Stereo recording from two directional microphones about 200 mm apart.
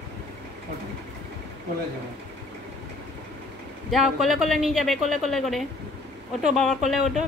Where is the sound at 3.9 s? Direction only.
Centre (ahead or behind).